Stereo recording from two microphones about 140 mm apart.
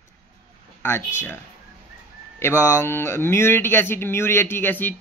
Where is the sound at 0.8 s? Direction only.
15° left (ahead or behind).